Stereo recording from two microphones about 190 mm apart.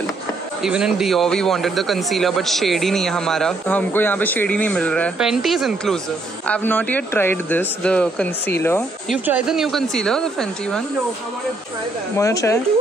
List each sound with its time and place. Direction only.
0.6 s a man's voice: 5° right (ahead or behind); by 8.8 s 10° left (ahead or behind)
9.2 s a man's voice: 5° right (ahead or behind)
12.2 s speech: 15° left (ahead or behind)